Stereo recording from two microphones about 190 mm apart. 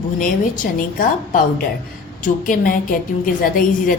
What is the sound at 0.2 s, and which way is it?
A woman's voice, 45° left (ahead or behind).